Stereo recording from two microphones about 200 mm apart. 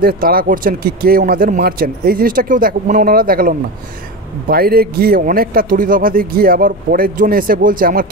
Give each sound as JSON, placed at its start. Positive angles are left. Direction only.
{"t": 0.0, "sound": "a man's voice", "side_deg": -45}